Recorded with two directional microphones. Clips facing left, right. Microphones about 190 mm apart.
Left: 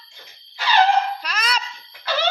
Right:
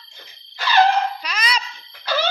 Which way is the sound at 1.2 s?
5° left (ahead or behind).